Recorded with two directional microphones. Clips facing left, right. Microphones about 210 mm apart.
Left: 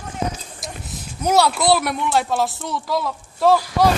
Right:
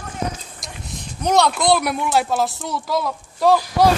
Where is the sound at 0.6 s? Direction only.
5° left (ahead or behind).